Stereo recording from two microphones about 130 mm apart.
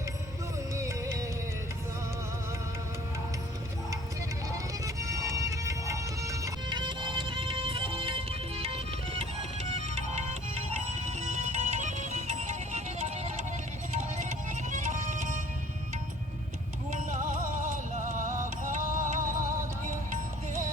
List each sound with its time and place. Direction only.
0.8 s music: 20° right (ahead or behind)
4.5 s music: 25° right (ahead or behind)
6.7 s music: 35° right (ahead or behind)
9.6 s music: 55° right (ahead or behind)
14.7 s music: 65° right (ahead or behind)
16.9 s music: 75° right (ahead or behind)
20.1 s music: 90° right